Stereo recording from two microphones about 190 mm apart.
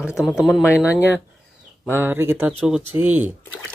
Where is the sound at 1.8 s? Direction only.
10° right (ahead or behind).